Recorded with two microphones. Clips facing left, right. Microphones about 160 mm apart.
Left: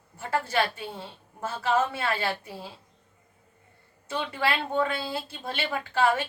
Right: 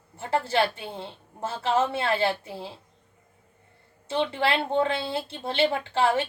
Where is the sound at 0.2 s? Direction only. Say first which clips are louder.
Right 2 dB; 25° right (ahead or behind).